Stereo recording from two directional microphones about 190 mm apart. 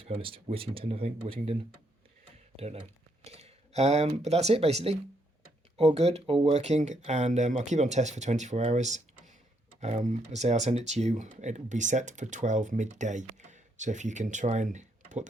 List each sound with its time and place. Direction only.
0.0 s speech: 30° right (ahead or behind)
3.2 s speech: 35° right (ahead or behind)